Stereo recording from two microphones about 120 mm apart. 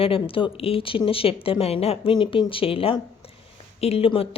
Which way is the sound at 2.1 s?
40° left (ahead or behind).